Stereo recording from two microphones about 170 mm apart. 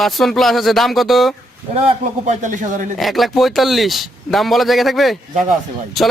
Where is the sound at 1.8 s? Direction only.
40° right (ahead or behind).